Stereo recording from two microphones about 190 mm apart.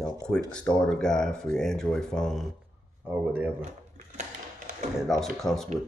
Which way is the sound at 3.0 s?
10° right (ahead or behind).